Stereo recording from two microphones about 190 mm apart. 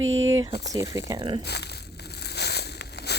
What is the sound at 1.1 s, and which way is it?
Speech, 25° right (ahead or behind).